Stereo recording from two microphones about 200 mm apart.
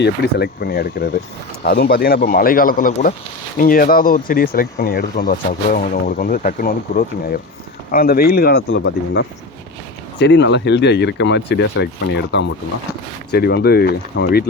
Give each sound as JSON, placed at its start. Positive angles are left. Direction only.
{"t": 0.0, "sound": "speech", "side_deg": 55}